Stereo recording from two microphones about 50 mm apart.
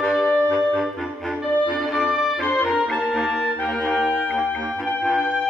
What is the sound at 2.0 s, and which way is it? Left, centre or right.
Music, centre.